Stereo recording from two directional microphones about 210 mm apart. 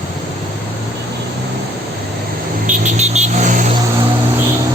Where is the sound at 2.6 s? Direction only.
35° right (ahead or behind).